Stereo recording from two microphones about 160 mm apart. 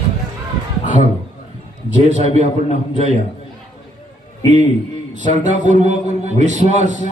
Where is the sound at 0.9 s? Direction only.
50° left (ahead or behind).